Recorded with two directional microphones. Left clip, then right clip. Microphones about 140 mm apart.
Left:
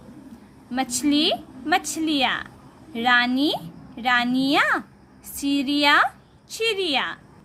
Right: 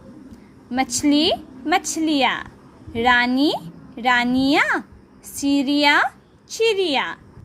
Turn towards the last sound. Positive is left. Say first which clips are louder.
# right 3 dB
turn(degrees=-20)  # may be behind; listen again after turning